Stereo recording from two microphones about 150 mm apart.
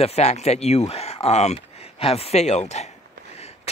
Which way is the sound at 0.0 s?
45° left (ahead or behind).